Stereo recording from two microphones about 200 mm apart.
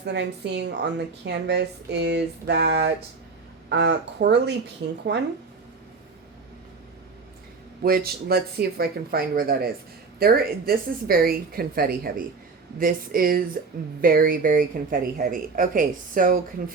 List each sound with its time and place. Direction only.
0.0 s a woman's voice: 60° right (ahead or behind)
7.8 s speech: 50° right (ahead or behind)